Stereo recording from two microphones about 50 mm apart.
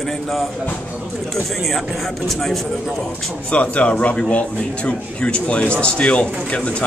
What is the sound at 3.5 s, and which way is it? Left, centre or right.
A man's voice, left.